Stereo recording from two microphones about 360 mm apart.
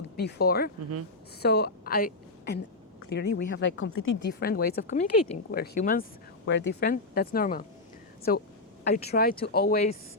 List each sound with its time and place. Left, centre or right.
0.2 s a woman's voice: left